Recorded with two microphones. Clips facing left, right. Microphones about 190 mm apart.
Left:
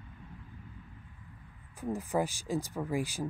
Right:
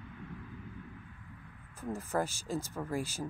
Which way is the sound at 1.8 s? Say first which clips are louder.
Left 2 dB; 15° left (ahead or behind).